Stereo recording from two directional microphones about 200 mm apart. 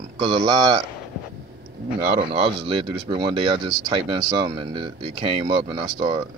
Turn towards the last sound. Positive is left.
turn(degrees=-20)  # may be behind; listen again after turning